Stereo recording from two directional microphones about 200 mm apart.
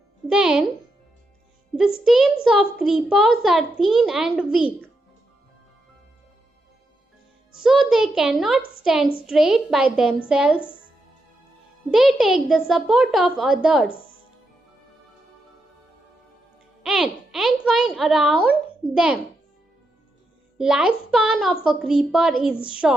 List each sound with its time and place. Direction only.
0.3 s speech: 5° right (ahead or behind)
2.0 s a child's voice: centre (ahead or behind)
7.6 s a child's voice: 5° right (ahead or behind)
11.9 s a child's voice: centre (ahead or behind)
16.8 s a child's voice: centre (ahead or behind)
20.6 s a child's voice: 5° right (ahead or behind)